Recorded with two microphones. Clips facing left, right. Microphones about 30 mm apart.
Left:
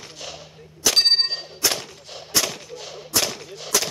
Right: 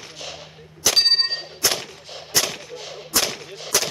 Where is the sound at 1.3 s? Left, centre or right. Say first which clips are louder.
Right 1 dB; centre.